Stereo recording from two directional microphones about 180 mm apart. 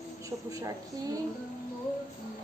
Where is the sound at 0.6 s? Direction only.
20° right (ahead or behind).